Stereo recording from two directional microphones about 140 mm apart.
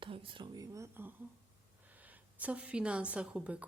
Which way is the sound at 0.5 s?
25° right (ahead or behind).